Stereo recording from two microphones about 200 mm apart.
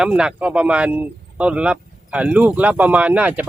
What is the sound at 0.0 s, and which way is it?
Speech, 5° right (ahead or behind).